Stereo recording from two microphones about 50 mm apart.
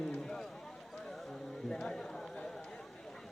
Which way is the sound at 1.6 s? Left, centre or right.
Centre.